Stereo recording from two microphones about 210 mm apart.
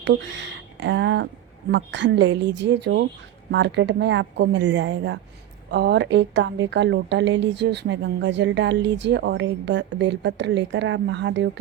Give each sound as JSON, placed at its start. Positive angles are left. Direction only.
{"t": 0.0, "sound": "speech", "side_deg": -60}